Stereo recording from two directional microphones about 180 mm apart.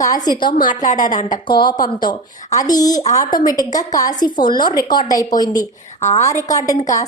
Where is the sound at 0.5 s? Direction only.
50° left (ahead or behind).